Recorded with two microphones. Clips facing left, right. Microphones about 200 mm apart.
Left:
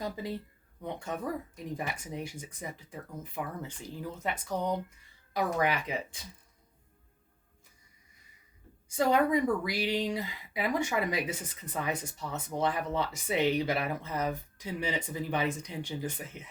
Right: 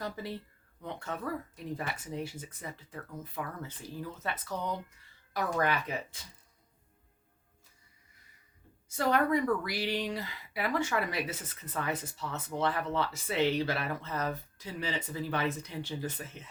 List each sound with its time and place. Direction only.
0.0 s speech: 15° left (ahead or behind)
9.0 s speech: 15° left (ahead or behind)